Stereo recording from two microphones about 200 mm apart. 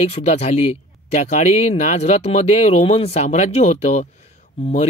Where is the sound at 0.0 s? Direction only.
30° left (ahead or behind).